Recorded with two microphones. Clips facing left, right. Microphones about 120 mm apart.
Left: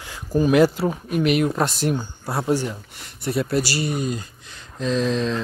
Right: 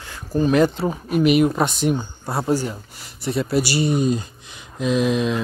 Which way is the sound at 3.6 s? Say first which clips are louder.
Right 5 dB; 20° right (ahead or behind).